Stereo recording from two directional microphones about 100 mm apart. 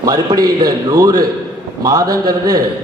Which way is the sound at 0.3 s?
35° right (ahead or behind).